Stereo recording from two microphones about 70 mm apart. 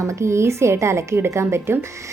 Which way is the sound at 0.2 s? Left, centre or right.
Right.